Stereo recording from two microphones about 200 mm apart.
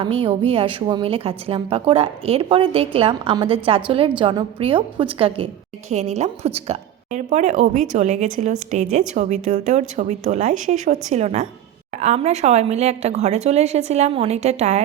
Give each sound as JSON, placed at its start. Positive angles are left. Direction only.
{"t": 0.0, "sound": "a woman's voice", "side_deg": -30}